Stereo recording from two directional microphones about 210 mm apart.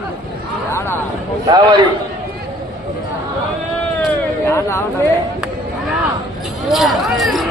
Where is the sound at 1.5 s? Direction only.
20° right (ahead or behind).